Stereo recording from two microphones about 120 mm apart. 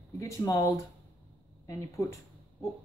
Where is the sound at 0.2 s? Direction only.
25° left (ahead or behind).